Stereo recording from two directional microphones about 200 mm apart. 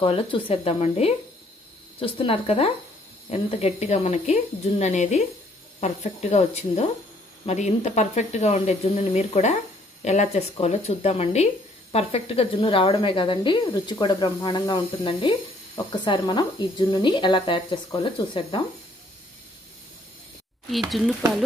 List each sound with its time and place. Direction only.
0.0 s speech: 25° left (ahead or behind)